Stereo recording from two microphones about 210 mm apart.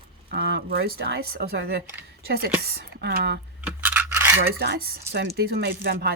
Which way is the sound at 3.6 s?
5° right (ahead or behind).